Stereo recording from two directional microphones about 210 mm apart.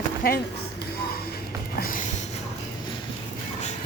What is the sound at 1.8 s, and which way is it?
Music, 40° left (ahead or behind).